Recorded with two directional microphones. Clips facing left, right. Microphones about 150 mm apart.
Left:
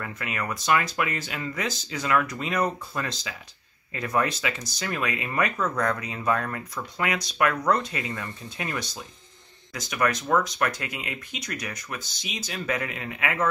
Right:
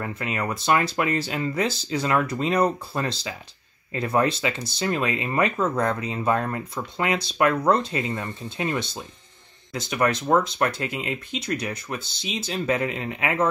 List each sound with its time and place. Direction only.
0.0 s speech: 30° right (ahead or behind)